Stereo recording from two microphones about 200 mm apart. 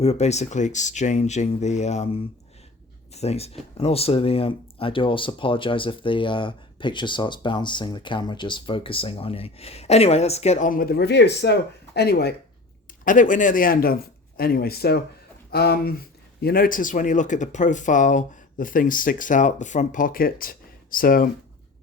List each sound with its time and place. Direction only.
0.0 s speech: 30° left (ahead or behind); by 12.3 s 50° left (ahead or behind)
13.1 s speech: 40° left (ahead or behind)